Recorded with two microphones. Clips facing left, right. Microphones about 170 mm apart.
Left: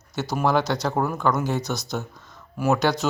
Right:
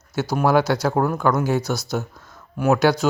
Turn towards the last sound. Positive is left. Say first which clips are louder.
# right 4 dB
turn(degrees=0)  # may be behind; listen again after turning